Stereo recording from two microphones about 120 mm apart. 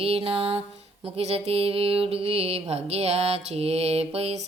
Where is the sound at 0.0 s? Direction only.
55° right (ahead or behind).